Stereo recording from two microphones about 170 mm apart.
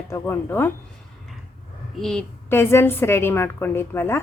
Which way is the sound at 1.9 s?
5° left (ahead or behind).